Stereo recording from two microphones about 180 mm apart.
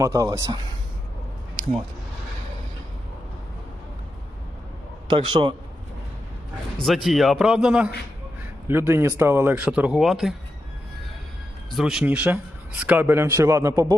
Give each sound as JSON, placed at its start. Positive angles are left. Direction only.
{"t": 0.0, "sound": "speech", "side_deg": -20}
{"t": 5.0, "sound": "speech", "side_deg": -25}
{"t": 6.8, "sound": "a man's voice", "side_deg": 0}
{"t": 11.7, "sound": "a man's voice", "side_deg": 0}